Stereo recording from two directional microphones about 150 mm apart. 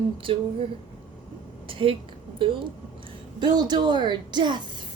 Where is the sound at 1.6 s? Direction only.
35° right (ahead or behind).